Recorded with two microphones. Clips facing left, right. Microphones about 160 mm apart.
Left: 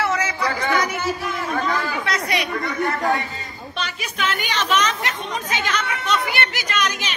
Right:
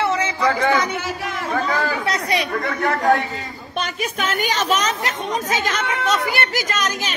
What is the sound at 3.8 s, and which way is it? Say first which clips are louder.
A woman's voice: right 1 dB; 50° right (ahead or behind).